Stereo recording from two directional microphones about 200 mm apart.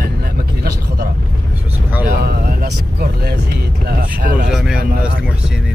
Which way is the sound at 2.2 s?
55° right (ahead or behind).